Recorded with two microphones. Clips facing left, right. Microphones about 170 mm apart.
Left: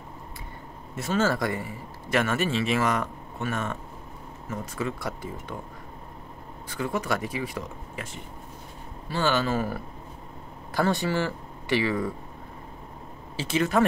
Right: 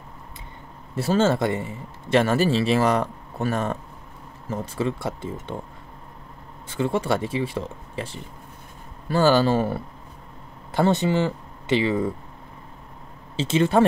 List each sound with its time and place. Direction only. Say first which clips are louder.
0.9 s a man's voice: right 5 dB; 30° right (ahead or behind)
6.7 s speech: right 5 dB; 25° right (ahead or behind)
13.4 s speech: right 5 dB; 25° right (ahead or behind)